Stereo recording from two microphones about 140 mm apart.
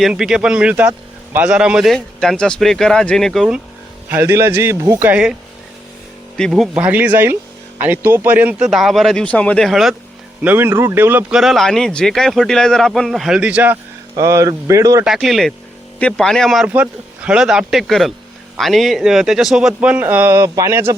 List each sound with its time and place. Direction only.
0.0 s a man's voice: 5° right (ahead or behind)
4.1 s a man's voice: 15° right (ahead or behind)
6.3 s a man's voice: centre (ahead or behind)
10.4 s a man's voice: 15° right (ahead or behind)
11.3 s speech: centre (ahead or behind)
14.2 s speech: 20° right (ahead or behind)
15.0 s speech: centre (ahead or behind)
16.6 s speech: 10° right (ahead or behind)